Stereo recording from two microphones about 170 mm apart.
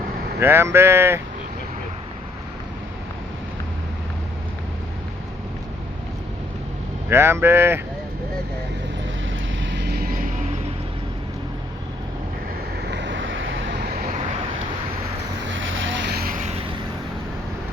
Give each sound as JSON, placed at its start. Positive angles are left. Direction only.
{"t": 0.3, "sound": "speech", "side_deg": -15}
{"t": 7.1, "sound": "speech", "side_deg": -15}
{"t": 9.7, "sound": "music", "side_deg": -70}
{"t": 12.9, "sound": "vehicle", "side_deg": -90}
{"t": 15.4, "sound": "vehicle", "side_deg": -90}
{"t": 16.4, "sound": "vehicle", "side_deg": -40}